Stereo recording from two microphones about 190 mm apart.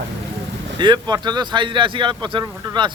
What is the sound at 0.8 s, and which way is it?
Speech, 20° right (ahead or behind).